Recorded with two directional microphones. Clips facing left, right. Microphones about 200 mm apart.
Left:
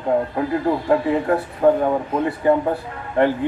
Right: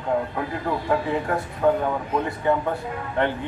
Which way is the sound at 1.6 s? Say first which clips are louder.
Left 5 dB; 35° left (ahead or behind).